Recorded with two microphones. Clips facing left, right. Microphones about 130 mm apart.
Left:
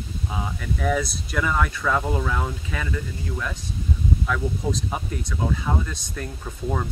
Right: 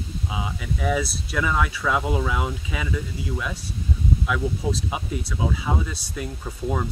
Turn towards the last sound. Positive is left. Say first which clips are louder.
# right 1 dB
turn(degrees=-5)  # may be behind; listen again after turning